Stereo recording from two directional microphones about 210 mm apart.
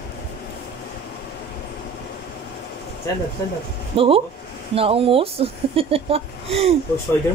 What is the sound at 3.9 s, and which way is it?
Speech, 25° right (ahead or behind).